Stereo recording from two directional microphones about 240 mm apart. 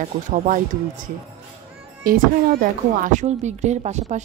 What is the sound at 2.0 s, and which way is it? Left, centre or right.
A woman's voice, right.